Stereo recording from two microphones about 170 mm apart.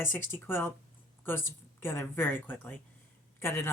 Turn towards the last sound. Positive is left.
turn(degrees=15)  # may be behind; listen again after turning